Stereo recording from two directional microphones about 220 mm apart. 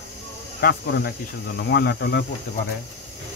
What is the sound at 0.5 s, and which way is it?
Speech, 45° left (ahead or behind).